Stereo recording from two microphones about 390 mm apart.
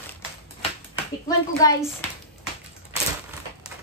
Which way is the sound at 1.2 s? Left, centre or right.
Centre.